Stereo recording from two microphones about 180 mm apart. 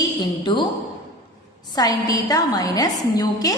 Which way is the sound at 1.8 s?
20° left (ahead or behind).